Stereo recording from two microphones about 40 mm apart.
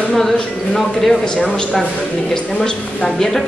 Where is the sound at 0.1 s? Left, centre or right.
Centre; by 3.2 s left.